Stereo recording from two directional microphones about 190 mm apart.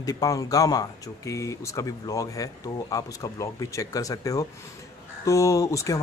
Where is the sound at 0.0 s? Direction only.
20° left (ahead or behind).